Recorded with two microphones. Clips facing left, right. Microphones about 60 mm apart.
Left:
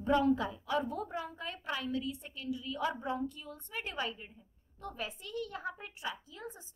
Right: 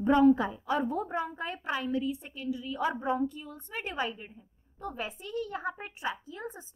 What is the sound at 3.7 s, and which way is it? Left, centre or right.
A woman's voice, right.